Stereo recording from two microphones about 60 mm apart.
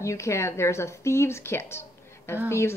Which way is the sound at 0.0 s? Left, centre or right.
Left.